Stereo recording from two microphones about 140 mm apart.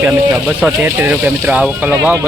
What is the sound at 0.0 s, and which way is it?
A man's voice, 10° right (ahead or behind).